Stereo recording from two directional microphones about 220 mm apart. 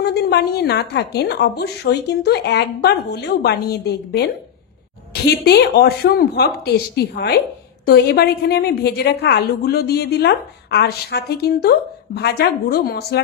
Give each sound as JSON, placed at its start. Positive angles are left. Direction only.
{"t": 0.0, "sound": "speech", "side_deg": 50}